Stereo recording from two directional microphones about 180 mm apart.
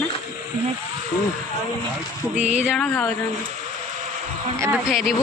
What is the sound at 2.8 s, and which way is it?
Speech, 10° left (ahead or behind).